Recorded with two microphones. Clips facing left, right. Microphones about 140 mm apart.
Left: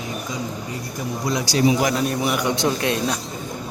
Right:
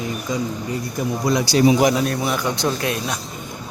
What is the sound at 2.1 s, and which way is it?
Speech, 15° left (ahead or behind).